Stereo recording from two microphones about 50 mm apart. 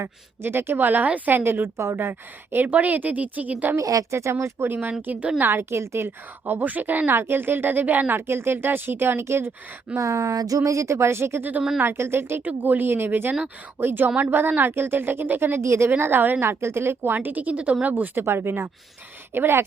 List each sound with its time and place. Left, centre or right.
0.4 s a woman's voice: right
1.5 s a woman's voice: right
3.8 s speech: right
4.7 s a woman's voice: right
5.4 s a woman's voice: right
7.1 s a woman's voice: right
8.3 s a woman's voice: right
9.9 s a woman's voice: right
12.5 s a woman's voice: right
15.6 s speech: right
15.9 s a woman's voice: right
16.5 s a woman's voice: right
17.2 s a woman's voice: right
18.2 s a woman's voice: right